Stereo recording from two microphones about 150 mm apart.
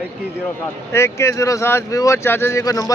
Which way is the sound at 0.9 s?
20° left (ahead or behind).